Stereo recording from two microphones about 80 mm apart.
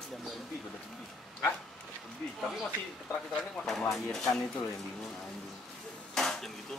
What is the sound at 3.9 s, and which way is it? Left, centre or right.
Speech, centre.